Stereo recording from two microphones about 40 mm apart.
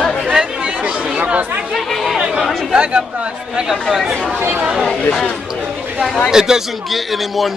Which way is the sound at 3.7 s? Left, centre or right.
Centre.